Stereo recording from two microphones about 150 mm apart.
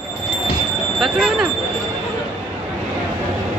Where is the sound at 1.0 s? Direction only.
Centre (ahead or behind).